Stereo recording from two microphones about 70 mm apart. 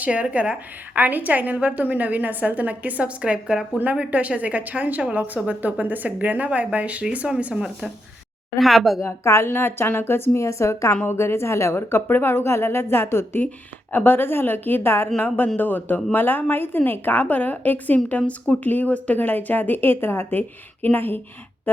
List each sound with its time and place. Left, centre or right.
0.0 s a woman's voice: right
3.8 s a woman's voice: right
7.5 s speech: centre
9.0 s a woman's voice: left